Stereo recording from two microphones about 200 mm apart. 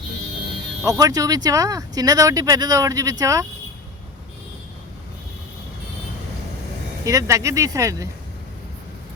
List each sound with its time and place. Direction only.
0.9 s speech: 20° right (ahead or behind)
7.0 s speech: 15° right (ahead or behind)